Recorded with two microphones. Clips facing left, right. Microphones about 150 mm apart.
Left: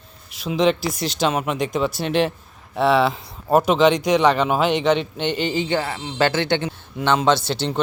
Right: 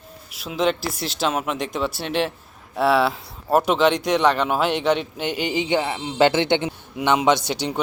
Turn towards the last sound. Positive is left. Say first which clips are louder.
# left 1 dB
turn(degrees=-10)  # may be behind; listen again after turning